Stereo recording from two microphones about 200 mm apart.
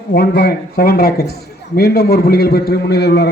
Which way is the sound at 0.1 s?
50° left (ahead or behind).